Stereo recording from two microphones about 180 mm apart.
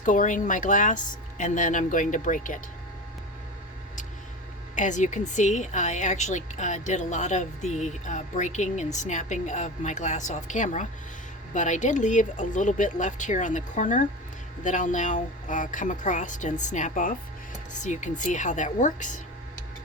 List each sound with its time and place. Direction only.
0.0 s speech: 45° left (ahead or behind)
4.7 s a woman's voice: 45° left (ahead or behind)